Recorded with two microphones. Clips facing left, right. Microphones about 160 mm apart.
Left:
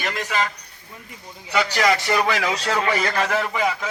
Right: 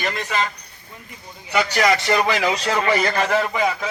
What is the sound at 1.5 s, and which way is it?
Speech, 15° right (ahead or behind).